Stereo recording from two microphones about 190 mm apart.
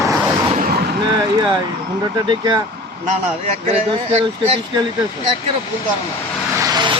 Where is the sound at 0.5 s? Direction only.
50° right (ahead or behind).